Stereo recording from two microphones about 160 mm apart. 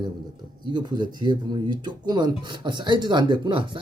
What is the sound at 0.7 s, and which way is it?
Speech, 25° right (ahead or behind).